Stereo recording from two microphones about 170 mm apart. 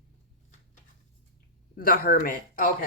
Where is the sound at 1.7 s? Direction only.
55° left (ahead or behind).